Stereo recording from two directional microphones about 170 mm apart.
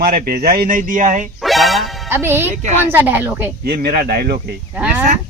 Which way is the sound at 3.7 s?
60° right (ahead or behind).